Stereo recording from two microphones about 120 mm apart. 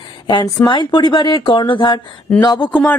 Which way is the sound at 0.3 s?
40° left (ahead or behind).